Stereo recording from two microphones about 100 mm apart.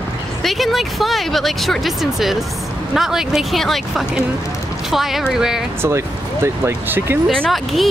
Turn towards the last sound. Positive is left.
turn(degrees=0)  # may be behind; listen again after turning